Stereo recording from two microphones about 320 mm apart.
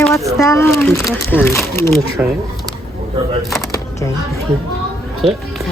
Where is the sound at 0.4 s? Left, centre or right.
Centre.